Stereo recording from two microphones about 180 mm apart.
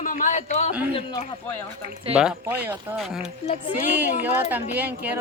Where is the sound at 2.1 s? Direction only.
5° right (ahead or behind).